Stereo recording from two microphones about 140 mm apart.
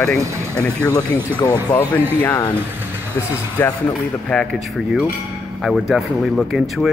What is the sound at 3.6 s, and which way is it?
Speech, 10° left (ahead or behind).